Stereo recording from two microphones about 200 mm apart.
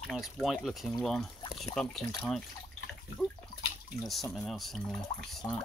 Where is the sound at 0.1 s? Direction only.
Centre (ahead or behind).